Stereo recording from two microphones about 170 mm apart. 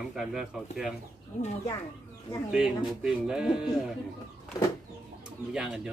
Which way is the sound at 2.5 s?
5° right (ahead or behind).